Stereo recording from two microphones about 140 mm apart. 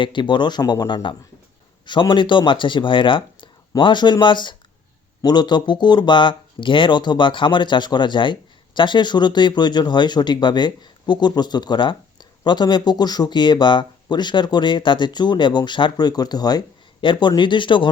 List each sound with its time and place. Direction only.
0.0 s speech: 35° left (ahead or behind)